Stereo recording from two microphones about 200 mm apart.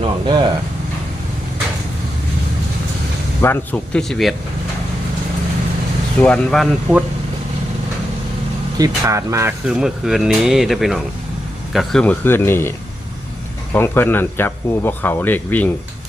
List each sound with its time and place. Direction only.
0.0 s speech: 25° right (ahead or behind)
3.4 s speech: 10° left (ahead or behind)
6.2 s speech: 5° left (ahead or behind)
8.8 s speech: 15° right (ahead or behind); by 12.7 s 10° left (ahead or behind)
13.7 s speech: 10° left (ahead or behind)